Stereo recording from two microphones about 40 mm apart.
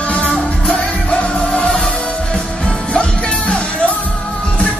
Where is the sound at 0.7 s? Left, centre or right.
Left.